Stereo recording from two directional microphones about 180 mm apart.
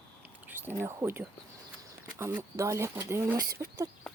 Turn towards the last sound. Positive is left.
turn(degrees=-15)  # may be behind; listen again after turning